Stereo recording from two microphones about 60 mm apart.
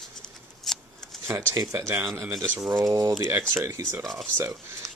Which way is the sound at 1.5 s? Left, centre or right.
Right.